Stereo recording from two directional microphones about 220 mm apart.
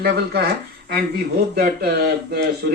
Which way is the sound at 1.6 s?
45° right (ahead or behind).